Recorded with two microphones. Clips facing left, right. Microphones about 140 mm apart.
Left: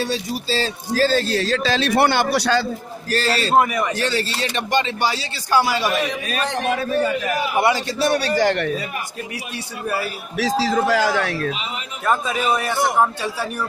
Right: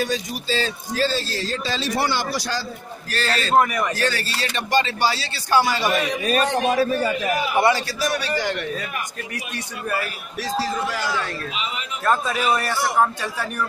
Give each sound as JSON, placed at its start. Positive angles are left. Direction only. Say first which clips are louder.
{"t": 0.0, "sound": "speech", "louder": "left 1 dB", "side_deg": 35}
{"t": 1.2, "sound": "a man's voice", "louder": "left 7 dB", "side_deg": 70}
{"t": 3.1, "sound": "speech", "louder": "left 5 dB", "side_deg": 40}
{"t": 3.5, "sound": "speech", "louder": "even", "side_deg": 5}
{"t": 3.9, "sound": "speech", "louder": "left 2 dB", "side_deg": 25}
{"t": 5.6, "sound": "speech", "louder": "left 1 dB", "side_deg": 5}
{"t": 6.2, "sound": "a man's voice", "louder": "right 3 dB", "side_deg": -35}
{"t": 7.5, "sound": "a man's voice", "louder": "even", "side_deg": 15}
{"t": 8.0, "sound": "speech", "louder": "left 5 dB", "side_deg": 30}
{"t": 8.4, "sound": "speech", "louder": "left 7 dB", "side_deg": 65}
{"t": 10.3, "sound": "a man's voice", "louder": "left 6 dB", "side_deg": 90}
{"t": 12.0, "sound": "speech", "louder": "left 1 dB", "side_deg": 0}